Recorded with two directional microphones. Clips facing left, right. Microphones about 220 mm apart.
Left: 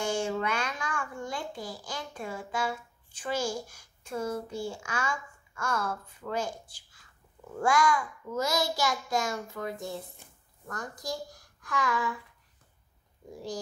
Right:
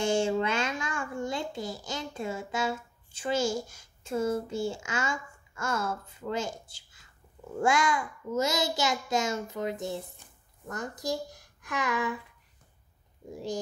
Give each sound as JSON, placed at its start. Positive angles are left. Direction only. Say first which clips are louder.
{"t": 0.0, "sound": "a child's voice", "louder": "right 4 dB", "side_deg": -25}
{"t": 13.3, "sound": "a child's voice", "louder": "right 3 dB", "side_deg": -20}